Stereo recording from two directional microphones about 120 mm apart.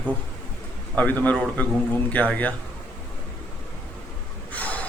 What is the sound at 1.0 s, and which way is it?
A man's voice, 15° left (ahead or behind).